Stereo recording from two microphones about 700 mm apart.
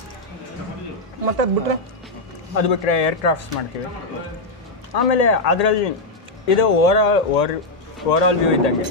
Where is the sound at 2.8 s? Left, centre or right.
Left.